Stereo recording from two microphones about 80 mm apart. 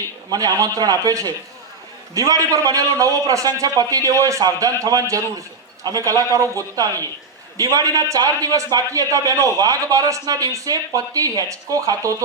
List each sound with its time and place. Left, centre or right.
0.3 s a man's voice: right